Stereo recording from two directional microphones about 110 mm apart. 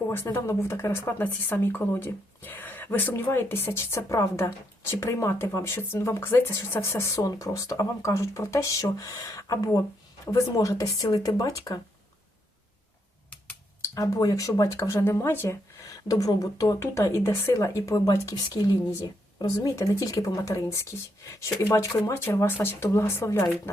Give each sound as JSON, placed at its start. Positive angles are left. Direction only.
{"t": 0.3, "sound": "speech", "side_deg": 25}
{"t": 13.9, "sound": "speech", "side_deg": 35}
{"t": 19.4, "sound": "speech", "side_deg": 30}